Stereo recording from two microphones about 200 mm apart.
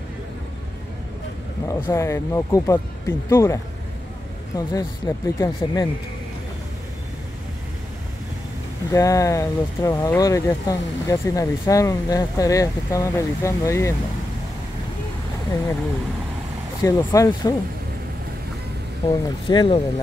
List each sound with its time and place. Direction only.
1.9 s speech: 15° left (ahead or behind)
8.9 s speech: 15° left (ahead or behind)
16.8 s speech: 15° left (ahead or behind)
19.0 s speech: 20° left (ahead or behind)